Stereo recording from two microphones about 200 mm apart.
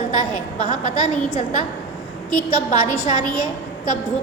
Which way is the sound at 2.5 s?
35° left (ahead or behind).